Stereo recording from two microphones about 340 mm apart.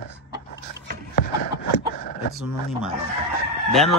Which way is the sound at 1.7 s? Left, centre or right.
Left.